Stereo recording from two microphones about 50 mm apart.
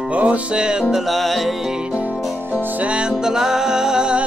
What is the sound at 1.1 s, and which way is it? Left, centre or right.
Music, centre.